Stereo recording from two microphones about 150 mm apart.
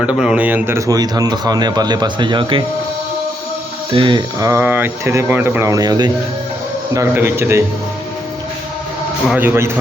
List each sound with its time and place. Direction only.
0.0 s speech: 5° right (ahead or behind); by 2.6 s 35° right (ahead or behind)
3.9 s speech: 30° right (ahead or behind); by 7.6 s 15° right (ahead or behind)
9.4 s speech: 15° right (ahead or behind)